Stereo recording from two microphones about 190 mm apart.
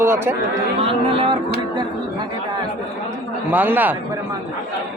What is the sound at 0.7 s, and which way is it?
Speech, 30° right (ahead or behind).